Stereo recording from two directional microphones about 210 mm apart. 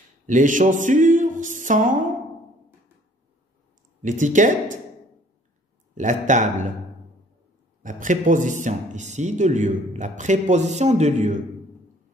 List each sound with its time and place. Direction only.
0.3 s speech: 40° right (ahead or behind)
4.0 s speech: 35° right (ahead or behind)
5.9 s speech: 35° right (ahead or behind)
7.8 s speech: 40° right (ahead or behind)